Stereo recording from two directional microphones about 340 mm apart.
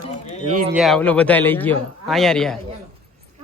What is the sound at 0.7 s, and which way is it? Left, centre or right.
Speech, centre.